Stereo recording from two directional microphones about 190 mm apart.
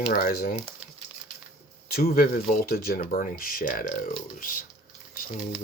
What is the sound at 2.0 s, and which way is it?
Speech, 50° left (ahead or behind).